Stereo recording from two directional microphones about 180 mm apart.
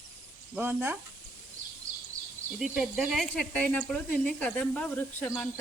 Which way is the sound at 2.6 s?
5° right (ahead or behind).